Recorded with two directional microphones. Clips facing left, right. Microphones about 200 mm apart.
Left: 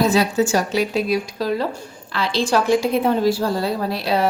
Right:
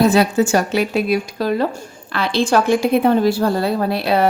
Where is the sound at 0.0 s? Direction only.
55° right (ahead or behind).